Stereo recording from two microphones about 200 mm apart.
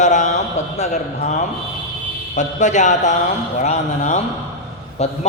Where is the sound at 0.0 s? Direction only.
35° left (ahead or behind).